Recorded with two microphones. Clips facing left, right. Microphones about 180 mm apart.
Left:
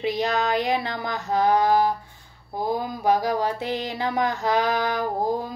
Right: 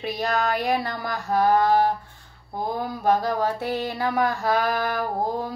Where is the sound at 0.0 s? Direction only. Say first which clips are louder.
Left 1 dB; 20° left (ahead or behind).